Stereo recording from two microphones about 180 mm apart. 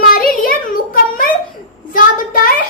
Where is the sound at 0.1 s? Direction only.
50° left (ahead or behind).